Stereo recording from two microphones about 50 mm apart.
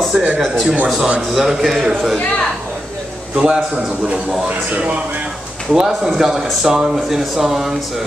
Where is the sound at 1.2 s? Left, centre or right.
Centre.